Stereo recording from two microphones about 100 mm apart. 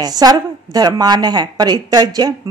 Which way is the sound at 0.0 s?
40° right (ahead or behind).